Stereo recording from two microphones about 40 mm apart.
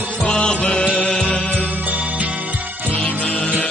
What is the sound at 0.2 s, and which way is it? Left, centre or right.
Music, left.